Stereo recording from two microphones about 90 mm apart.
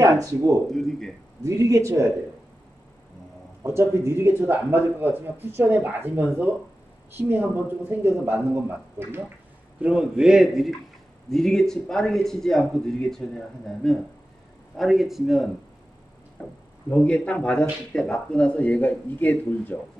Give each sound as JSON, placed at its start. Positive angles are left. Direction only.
{"t": 0.0, "sound": "speech", "side_deg": -40}
{"t": 0.7, "sound": "a man's voice", "side_deg": 5}
{"t": 1.4, "sound": "speech", "side_deg": -35}
{"t": 3.6, "sound": "speech", "side_deg": -30}
{"t": 9.8, "sound": "a man's voice", "side_deg": -10}
{"t": 16.9, "sound": "speech", "side_deg": 10}